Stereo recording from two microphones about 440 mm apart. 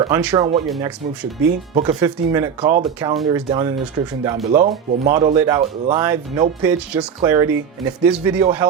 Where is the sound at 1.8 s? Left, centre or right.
Centre.